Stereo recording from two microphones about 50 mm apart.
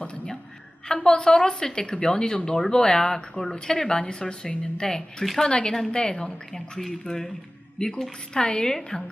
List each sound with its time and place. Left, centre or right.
0.9 s a woman's voice: centre